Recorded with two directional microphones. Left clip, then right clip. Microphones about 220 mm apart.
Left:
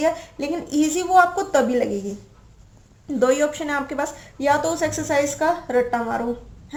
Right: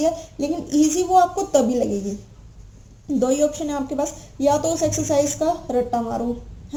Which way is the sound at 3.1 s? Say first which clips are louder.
Left 2 dB; 25° left (ahead or behind).